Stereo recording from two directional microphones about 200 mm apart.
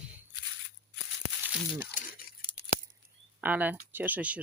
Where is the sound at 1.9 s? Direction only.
50° left (ahead or behind).